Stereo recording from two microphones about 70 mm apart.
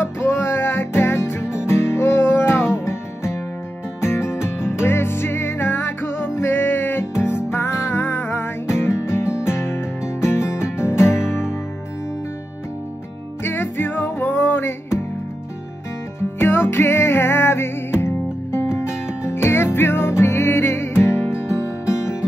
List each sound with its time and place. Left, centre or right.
0.0 s music: left
11.2 s music: centre
13.4 s music: left
16.3 s music: left